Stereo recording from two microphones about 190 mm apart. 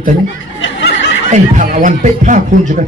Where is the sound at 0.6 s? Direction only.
70° left (ahead or behind).